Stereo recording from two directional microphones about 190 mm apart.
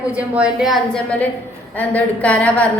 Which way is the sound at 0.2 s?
5° right (ahead or behind).